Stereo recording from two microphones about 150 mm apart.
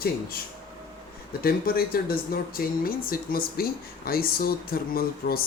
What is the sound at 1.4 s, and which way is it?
Speech, 80° left.